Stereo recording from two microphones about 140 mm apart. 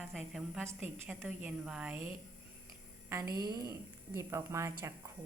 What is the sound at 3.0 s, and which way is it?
A woman's voice, 20° right (ahead or behind).